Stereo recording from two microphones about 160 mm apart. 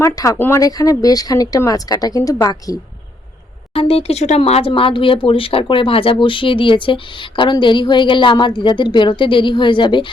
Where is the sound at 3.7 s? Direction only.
35° left (ahead or behind).